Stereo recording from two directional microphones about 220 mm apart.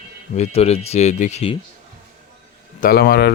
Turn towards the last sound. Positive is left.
turn(degrees=45)  # may be behind; listen again after turning